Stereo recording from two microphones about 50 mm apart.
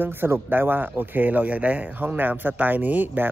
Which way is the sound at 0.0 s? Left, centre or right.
Right.